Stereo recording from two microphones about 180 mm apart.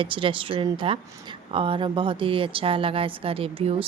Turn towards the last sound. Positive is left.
turn(degrees=-30)  # may be behind; listen again after turning